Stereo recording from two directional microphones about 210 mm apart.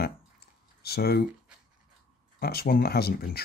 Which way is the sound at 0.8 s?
50° left (ahead or behind).